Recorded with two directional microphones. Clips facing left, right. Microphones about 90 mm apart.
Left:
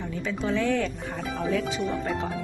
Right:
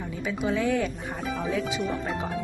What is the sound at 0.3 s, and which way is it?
Speech, 10° right (ahead or behind).